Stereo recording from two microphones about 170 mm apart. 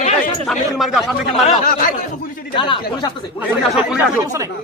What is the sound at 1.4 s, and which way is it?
Speech, 45° left (ahead or behind).